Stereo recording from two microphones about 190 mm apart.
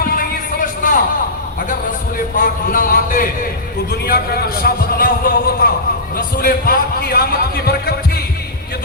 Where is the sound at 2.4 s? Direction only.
50° left (ahead or behind).